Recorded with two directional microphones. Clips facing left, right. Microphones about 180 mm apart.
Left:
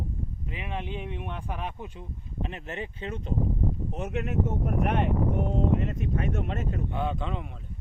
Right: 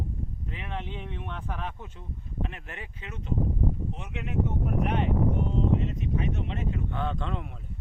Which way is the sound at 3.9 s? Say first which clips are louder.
Left 4 dB; 45° left (ahead or behind).